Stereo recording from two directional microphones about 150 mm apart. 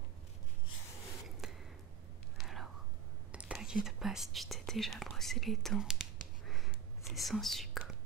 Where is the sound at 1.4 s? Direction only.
5° right (ahead or behind).